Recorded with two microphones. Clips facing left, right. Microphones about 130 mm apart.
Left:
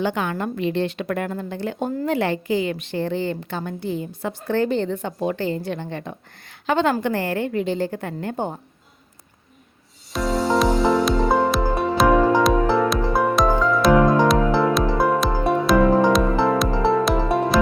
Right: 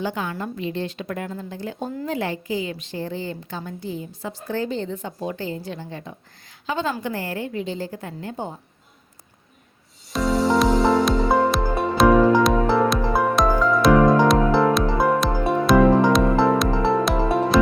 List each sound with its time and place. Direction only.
0.0 s a woman's voice: 70° left (ahead or behind)
10.1 s music: centre (ahead or behind)